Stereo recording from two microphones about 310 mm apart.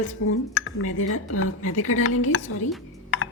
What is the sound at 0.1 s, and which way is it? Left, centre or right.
Speech, left.